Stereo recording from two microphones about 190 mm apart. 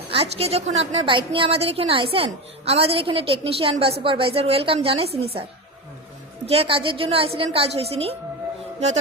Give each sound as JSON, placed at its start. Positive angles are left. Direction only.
{"t": 0.1, "sound": "a woman's voice", "side_deg": -30}